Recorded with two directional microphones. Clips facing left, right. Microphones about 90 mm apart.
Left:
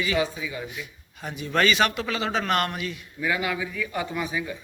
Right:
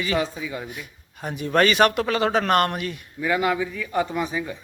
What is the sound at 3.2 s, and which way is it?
Speech, 35° right (ahead or behind).